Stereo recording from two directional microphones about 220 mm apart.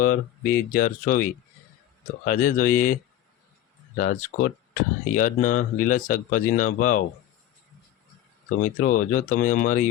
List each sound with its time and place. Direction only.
0.4 s speech: 40° left (ahead or behind)
8.4 s speech: 35° left (ahead or behind)